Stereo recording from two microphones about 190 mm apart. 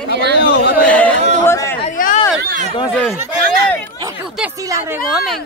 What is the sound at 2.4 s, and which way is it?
Speech, 50° right (ahead or behind).